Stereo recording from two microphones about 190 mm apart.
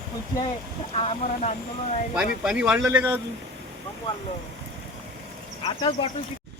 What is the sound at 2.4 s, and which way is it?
Speech, 5° right (ahead or behind).